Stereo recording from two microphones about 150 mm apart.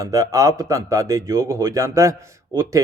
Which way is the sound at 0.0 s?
25° right (ahead or behind).